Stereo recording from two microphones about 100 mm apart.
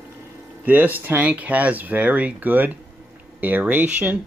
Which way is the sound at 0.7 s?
20° right (ahead or behind).